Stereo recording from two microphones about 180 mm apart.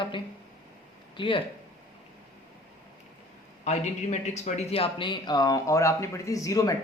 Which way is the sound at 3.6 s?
40° left (ahead or behind).